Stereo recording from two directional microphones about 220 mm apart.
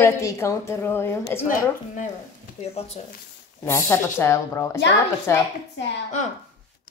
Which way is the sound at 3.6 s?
10° left (ahead or behind).